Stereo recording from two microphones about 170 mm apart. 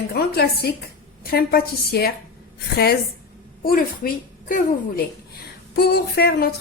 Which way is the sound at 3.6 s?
60° left (ahead or behind).